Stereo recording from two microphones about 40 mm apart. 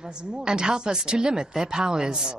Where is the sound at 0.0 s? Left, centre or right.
Centre.